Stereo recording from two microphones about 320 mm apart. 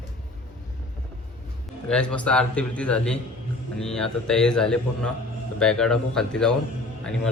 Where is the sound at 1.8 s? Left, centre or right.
Centre.